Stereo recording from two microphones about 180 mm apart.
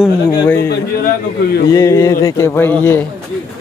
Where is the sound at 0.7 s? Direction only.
65° left (ahead or behind).